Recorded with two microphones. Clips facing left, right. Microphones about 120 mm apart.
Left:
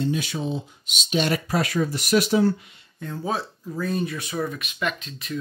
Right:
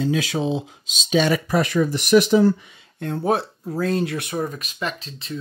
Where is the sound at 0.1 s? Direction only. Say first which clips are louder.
Right 5 dB; 90° right.